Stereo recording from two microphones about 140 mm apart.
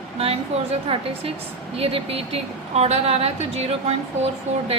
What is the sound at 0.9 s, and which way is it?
A woman's voice, 45° right (ahead or behind).